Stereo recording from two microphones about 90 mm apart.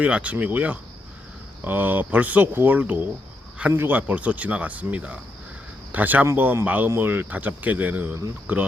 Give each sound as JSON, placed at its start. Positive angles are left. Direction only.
{"t": 0.0, "sound": "speech", "side_deg": -15}